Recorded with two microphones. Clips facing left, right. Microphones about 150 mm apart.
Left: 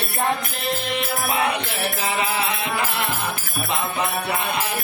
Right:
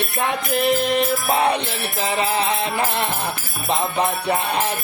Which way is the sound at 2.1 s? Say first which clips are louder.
Right 6 dB; 35° right (ahead or behind).